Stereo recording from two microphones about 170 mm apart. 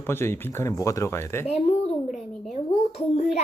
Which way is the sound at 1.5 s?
40° left (ahead or behind).